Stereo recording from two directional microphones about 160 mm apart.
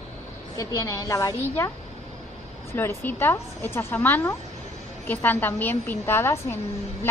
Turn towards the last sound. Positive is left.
turn(degrees=15)  # may be behind; listen again after turning